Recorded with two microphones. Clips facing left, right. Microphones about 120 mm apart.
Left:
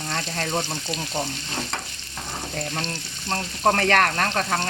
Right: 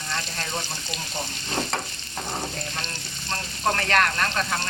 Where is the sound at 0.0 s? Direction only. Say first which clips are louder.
Left 4 dB; 60° left (ahead or behind).